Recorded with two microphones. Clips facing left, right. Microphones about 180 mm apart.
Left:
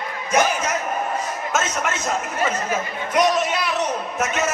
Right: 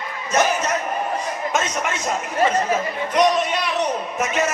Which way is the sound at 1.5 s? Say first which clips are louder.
Left 1 dB; centre (ahead or behind).